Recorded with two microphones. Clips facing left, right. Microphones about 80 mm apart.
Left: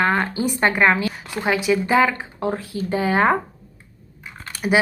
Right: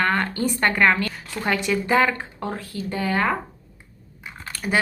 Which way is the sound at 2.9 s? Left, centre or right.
Left.